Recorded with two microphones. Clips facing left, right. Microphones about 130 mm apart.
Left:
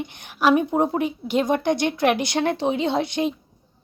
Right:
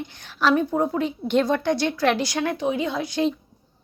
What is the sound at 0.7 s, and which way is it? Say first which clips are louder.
Speech: left 2 dB; 30° left (ahead or behind).